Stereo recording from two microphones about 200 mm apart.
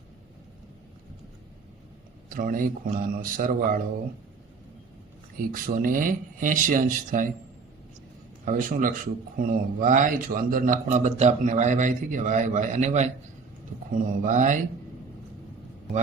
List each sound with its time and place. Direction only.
2.3 s speech: 45° right (ahead or behind)
5.5 s speech: 45° right (ahead or behind)
8.4 s a man's voice: 40° right (ahead or behind)